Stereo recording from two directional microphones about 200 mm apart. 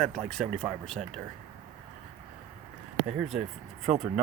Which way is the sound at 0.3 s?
Centre (ahead or behind).